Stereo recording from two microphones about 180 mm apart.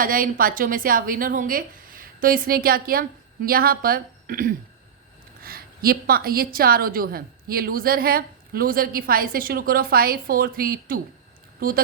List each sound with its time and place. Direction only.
0.0 s a woman's voice: 50° right (ahead or behind)